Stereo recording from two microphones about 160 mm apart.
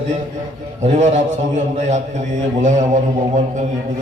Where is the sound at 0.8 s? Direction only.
45° right (ahead or behind).